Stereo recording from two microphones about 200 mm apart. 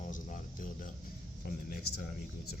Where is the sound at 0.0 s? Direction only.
40° left (ahead or behind).